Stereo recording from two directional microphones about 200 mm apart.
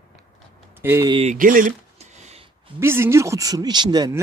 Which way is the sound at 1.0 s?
25° right (ahead or behind).